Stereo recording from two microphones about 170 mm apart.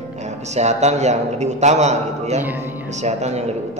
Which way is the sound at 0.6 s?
40° right (ahead or behind).